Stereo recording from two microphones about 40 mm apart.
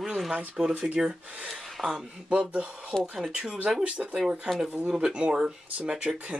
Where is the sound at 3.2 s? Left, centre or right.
Right.